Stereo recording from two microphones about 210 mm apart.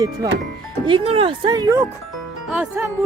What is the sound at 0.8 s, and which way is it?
Speech, 25° right (ahead or behind).